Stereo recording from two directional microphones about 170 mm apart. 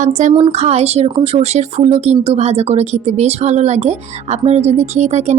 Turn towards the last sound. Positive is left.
turn(degrees=-40)  # may be behind; listen again after turning